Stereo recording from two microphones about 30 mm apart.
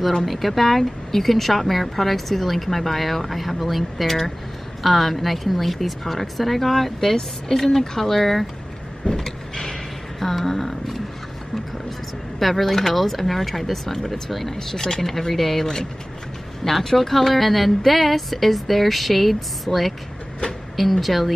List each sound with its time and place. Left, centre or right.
0.2 s speech: centre
9.1 s vehicle: centre
10.2 s a sound: centre
12.4 s speech: centre
15.6 s speech: centre